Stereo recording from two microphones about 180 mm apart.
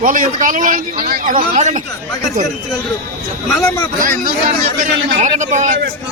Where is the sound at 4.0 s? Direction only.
50° right (ahead or behind).